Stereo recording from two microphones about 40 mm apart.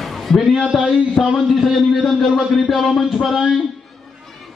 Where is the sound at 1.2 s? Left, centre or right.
Left.